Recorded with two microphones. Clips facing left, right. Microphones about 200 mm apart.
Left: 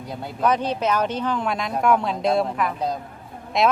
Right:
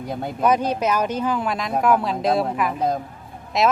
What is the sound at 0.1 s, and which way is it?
Speech, 55° right (ahead or behind).